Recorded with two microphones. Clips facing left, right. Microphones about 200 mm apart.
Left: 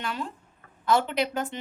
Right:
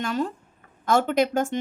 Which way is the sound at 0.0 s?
45° right (ahead or behind).